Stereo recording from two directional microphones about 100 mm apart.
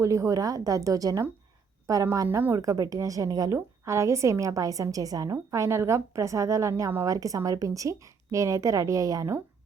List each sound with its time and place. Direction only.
0.0 s a woman's voice: 30° right (ahead or behind)
2.1 s a woman's voice: 25° right (ahead or behind)
2.6 s a woman's voice: 35° right (ahead or behind)